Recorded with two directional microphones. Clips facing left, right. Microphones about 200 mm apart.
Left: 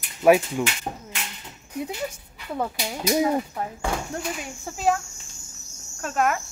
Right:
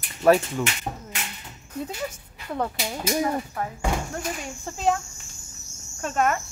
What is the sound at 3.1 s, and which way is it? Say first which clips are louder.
Speech: left 4 dB; 15° left (ahead or behind).